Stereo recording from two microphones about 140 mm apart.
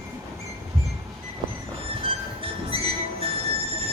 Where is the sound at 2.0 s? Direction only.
40° right (ahead or behind).